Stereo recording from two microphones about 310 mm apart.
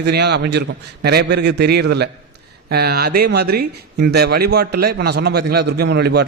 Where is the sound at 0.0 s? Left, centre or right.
Right.